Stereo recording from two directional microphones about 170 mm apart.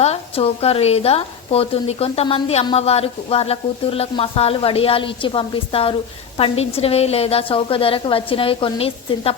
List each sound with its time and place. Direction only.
0.0 s speech: 35° left (ahead or behind)